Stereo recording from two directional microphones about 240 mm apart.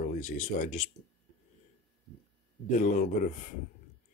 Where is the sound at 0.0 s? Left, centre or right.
Left.